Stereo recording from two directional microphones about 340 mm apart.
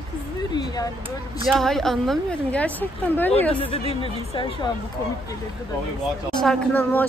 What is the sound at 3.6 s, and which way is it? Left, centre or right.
A woman's voice, centre.